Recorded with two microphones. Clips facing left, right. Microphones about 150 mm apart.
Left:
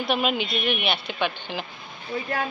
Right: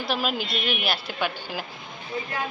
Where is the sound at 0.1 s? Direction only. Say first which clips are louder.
Left 3 dB; centre (ahead or behind).